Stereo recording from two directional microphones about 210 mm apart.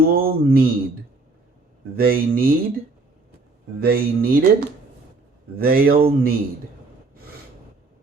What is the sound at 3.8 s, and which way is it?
Mantra, 45° right (ahead or behind).